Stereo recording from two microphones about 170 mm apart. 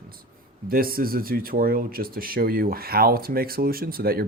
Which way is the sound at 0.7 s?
60° right (ahead or behind).